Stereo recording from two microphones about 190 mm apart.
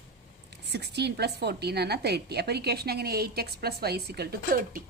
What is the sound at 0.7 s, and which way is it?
A woman's voice, 60° right (ahead or behind).